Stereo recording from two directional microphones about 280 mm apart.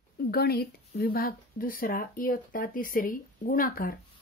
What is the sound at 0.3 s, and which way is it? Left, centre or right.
A woman's voice, left.